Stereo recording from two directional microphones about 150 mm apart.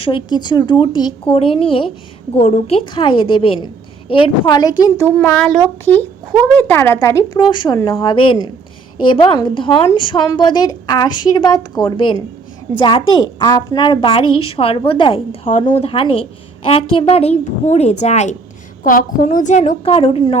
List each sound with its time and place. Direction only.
0.0 s a woman's voice: 30° left (ahead or behind)
4.8 s a child's voice: 20° left (ahead or behind)
7.3 s a woman's voice: 30° left (ahead or behind)
15.4 s a woman's voice: 50° left (ahead or behind)
18.8 s a woman's voice: 65° left (ahead or behind); by 20.2 s 45° left (ahead or behind)